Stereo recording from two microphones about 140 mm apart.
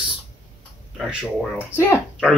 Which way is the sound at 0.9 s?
5° right (ahead or behind).